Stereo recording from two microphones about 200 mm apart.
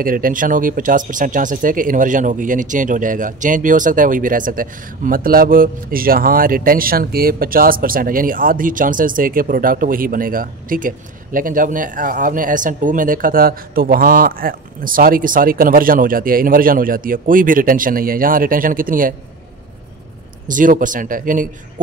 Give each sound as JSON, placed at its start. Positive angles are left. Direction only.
{"t": 0.0, "sound": "speech", "side_deg": -45}
{"t": 20.4, "sound": "speech", "side_deg": -40}